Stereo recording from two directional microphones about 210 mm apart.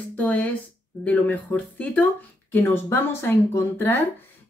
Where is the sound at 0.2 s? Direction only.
10° left (ahead or behind).